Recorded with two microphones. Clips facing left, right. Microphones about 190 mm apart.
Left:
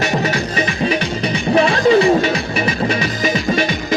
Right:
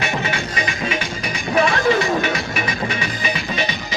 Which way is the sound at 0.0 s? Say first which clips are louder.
Left 5 dB; 40° left (ahead or behind).